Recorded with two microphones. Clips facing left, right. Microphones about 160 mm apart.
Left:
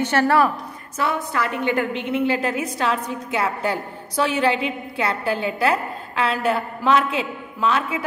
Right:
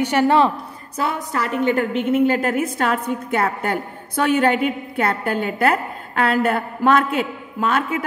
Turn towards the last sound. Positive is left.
turn(degrees=-50)  # may be behind; listen again after turning